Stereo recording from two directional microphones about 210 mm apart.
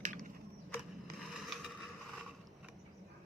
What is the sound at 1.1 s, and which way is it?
Skateboard, centre (ahead or behind).